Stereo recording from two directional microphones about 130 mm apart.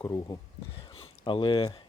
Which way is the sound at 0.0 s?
30° left (ahead or behind).